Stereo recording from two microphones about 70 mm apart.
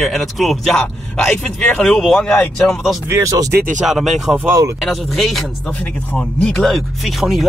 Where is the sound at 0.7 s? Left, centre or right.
Centre.